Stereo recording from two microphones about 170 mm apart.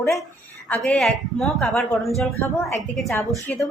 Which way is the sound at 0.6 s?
5° left (ahead or behind).